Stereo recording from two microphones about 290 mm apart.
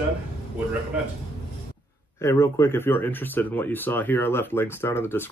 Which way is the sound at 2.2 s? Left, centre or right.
Centre.